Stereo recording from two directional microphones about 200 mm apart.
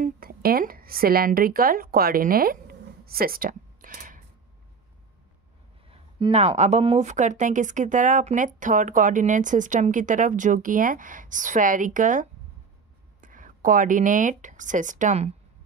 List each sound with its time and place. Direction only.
0.0 s speech: 45° right (ahead or behind)
3.1 s a sound: 50° right (ahead or behind)
5.9 s a woman's voice: 25° right (ahead or behind)